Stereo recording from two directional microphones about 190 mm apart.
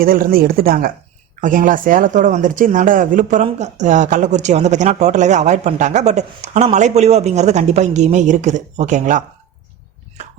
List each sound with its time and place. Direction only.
0.0 s speech: 50° right (ahead or behind)